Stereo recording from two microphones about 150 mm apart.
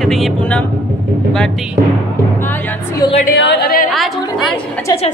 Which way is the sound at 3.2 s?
85° left.